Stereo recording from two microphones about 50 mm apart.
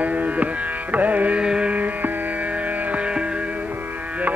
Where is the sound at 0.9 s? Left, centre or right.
Right.